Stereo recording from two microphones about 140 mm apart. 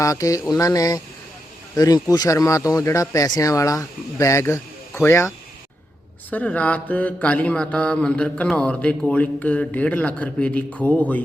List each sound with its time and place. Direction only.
0.0 s speech: 25° left (ahead or behind)
6.3 s mantra: 10° left (ahead or behind)